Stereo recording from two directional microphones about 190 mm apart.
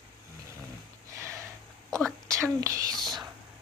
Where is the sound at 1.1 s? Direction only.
15° right (ahead or behind).